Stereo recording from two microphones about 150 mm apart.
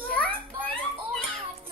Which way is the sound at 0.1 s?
10° left (ahead or behind).